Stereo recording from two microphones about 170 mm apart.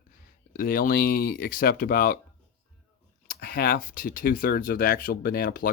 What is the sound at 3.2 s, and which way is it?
Speech, 60° left (ahead or behind).